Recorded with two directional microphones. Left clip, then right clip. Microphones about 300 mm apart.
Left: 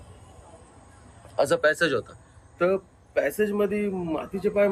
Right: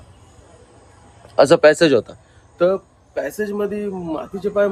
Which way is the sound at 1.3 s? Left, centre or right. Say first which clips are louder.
Right 10 dB; right.